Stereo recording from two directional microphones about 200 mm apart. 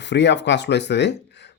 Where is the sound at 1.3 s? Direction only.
60° left (ahead or behind).